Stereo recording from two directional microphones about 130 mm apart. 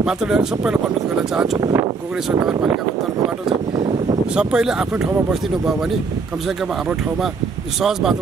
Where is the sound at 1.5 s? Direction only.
30° right (ahead or behind).